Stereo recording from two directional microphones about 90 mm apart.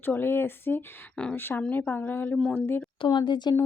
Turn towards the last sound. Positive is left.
turn(degrees=55)  # may be behind; listen again after turning